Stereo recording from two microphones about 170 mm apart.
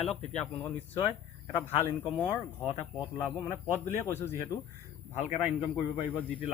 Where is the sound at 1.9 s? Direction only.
30° left (ahead or behind).